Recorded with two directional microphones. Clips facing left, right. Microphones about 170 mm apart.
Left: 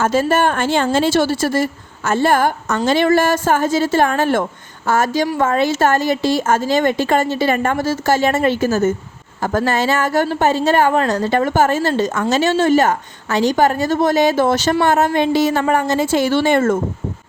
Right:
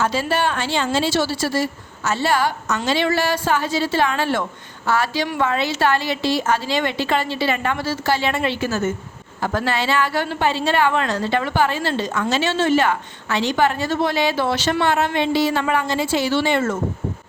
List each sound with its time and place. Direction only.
0.0 s a woman's voice: 50° left (ahead or behind)